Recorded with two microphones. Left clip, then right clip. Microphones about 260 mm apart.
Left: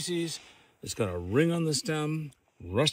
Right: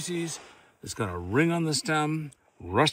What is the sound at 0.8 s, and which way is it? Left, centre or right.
Speech, centre.